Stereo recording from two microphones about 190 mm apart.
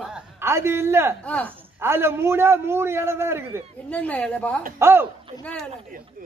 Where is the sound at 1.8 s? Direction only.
10° right (ahead or behind).